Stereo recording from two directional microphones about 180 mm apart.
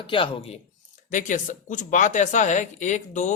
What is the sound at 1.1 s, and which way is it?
Speech, 45° left (ahead or behind).